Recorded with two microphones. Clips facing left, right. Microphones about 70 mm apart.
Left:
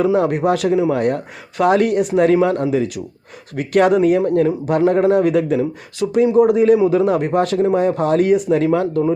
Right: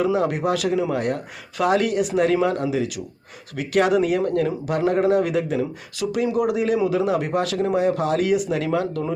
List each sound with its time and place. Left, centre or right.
0.0 s speech: left
5.5 s speech: left
6.5 s speech: left